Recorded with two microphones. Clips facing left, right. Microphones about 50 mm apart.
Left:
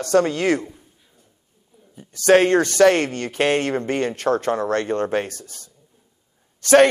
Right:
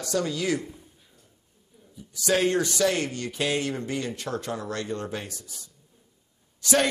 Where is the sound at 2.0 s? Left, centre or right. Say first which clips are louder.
Left 9 dB; left.